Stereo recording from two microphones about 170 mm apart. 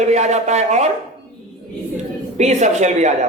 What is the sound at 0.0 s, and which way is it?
Speech, 40° right (ahead or behind).